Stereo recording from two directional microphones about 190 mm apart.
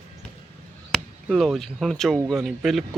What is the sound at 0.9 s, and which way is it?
Speech, centre (ahead or behind).